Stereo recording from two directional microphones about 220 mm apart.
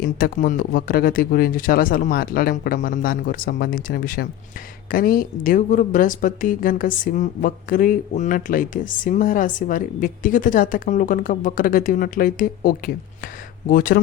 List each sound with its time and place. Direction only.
0.0 s speech: 40° left (ahead or behind)